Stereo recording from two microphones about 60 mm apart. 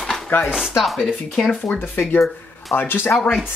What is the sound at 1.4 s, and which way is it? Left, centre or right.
Speech, left.